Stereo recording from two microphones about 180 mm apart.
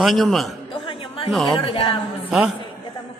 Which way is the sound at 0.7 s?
30° left (ahead or behind).